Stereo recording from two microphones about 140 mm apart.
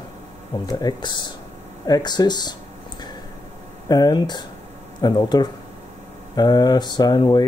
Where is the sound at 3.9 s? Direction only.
30° left (ahead or behind).